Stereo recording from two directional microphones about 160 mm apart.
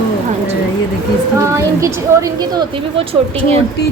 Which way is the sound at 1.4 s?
20° right (ahead or behind).